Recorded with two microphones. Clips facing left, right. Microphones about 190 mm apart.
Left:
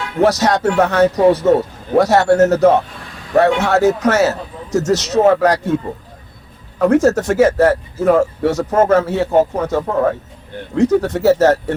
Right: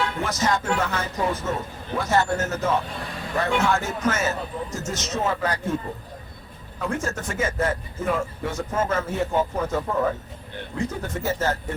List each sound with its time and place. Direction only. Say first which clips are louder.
0.2 s a man's voice: left 16 dB; 75° left (ahead or behind)
6.7 s a man's voice: left 16 dB; 70° left (ahead or behind)
10.8 s a man's voice: left 15 dB; 75° left (ahead or behind)